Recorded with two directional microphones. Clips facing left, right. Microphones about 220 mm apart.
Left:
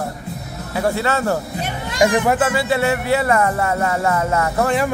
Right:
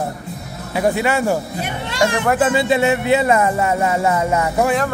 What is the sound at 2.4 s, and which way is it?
Music, 20° right (ahead or behind).